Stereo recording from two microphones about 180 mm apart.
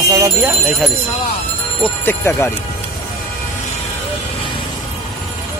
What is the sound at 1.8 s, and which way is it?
Speech, 15° left (ahead or behind).